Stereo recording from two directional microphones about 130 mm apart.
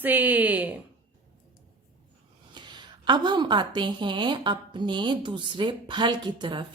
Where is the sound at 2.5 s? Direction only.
35° right (ahead or behind).